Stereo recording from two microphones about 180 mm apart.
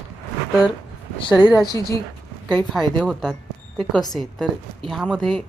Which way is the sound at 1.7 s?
20° left (ahead or behind).